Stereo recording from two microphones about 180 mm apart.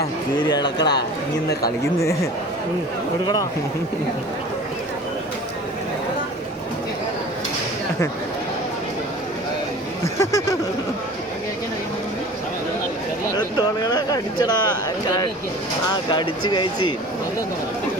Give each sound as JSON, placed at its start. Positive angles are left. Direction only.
{"t": 0.0, "sound": "speech", "side_deg": 25}
{"t": 10.0, "sound": "speech", "side_deg": 15}
{"t": 13.3, "sound": "speech", "side_deg": 25}
{"t": 15.9, "sound": "speech", "side_deg": 25}